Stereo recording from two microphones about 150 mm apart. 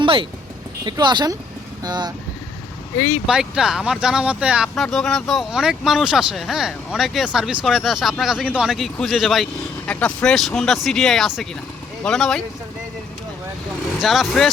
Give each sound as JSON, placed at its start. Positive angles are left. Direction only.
{"t": 0.0, "sound": "speech", "side_deg": -35}
{"t": 3.2, "sound": "speech", "side_deg": -5}
{"t": 14.0, "sound": "speech", "side_deg": 0}